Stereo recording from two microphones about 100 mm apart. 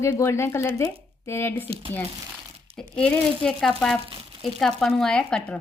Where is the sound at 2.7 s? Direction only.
10° left (ahead or behind).